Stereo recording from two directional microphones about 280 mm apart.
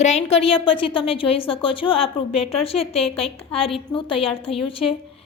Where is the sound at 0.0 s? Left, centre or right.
Left.